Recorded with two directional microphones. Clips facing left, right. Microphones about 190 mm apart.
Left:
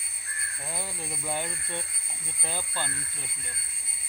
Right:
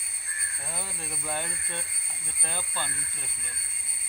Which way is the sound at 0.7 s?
15° left (ahead or behind).